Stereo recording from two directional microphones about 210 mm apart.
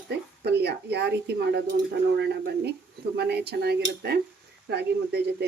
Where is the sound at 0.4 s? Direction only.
50° right (ahead or behind).